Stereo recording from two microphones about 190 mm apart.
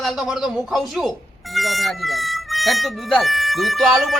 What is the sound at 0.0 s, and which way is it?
Speech, centre (ahead or behind).